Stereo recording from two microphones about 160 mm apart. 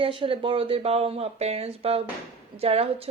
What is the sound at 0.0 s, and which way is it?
Speech, 35° right (ahead or behind).